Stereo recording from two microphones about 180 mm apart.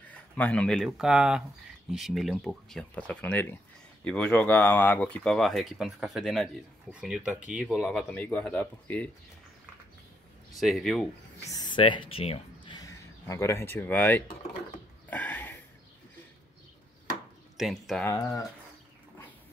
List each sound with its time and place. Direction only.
0.1 s speech: 10° left (ahead or behind)
10.5 s speech: centre (ahead or behind)
11.5 s speech: 25° left (ahead or behind)
15.0 s a sound: 10° left (ahead or behind)
17.6 s speech: centre (ahead or behind)
18.0 s speech: 20° left (ahead or behind)